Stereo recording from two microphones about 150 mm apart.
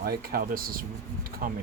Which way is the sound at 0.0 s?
85° right.